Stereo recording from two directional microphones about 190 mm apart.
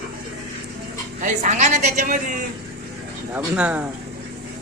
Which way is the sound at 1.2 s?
40° right (ahead or behind).